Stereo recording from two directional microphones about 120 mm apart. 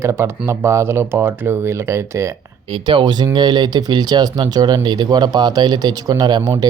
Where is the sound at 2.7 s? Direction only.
45° right (ahead or behind).